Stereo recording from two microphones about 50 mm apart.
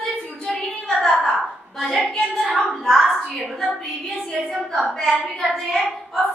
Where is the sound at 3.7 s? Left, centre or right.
Centre.